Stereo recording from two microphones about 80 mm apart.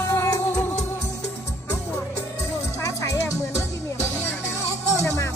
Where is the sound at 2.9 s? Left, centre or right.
Left.